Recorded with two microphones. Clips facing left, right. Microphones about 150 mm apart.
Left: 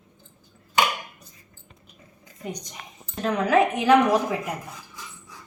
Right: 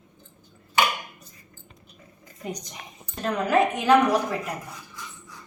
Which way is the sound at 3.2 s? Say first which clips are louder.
Left 2 dB; 10° left (ahead or behind).